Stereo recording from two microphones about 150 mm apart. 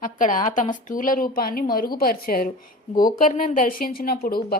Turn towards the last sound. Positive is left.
turn(degrees=85)